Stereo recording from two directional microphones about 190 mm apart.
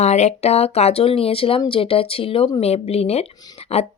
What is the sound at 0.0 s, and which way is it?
Speech, 35° left (ahead or behind).